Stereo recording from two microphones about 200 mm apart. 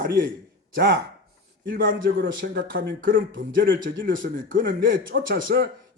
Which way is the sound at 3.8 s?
40° right (ahead or behind).